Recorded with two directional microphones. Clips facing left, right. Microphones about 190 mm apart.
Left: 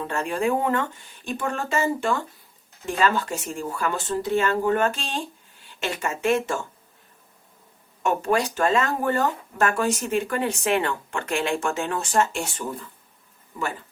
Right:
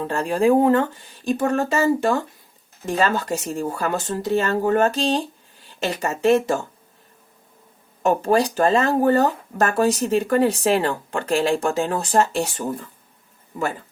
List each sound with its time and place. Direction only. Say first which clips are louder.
0.0 s speech: right 5 dB; 35° right (ahead or behind)
8.0 s speech: right 4 dB; 35° right (ahead or behind)